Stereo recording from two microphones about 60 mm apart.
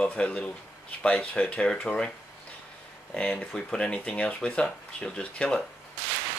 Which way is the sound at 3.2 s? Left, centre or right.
Centre.